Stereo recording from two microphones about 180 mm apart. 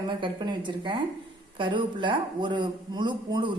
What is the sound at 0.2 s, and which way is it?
A man's voice, 25° right (ahead or behind).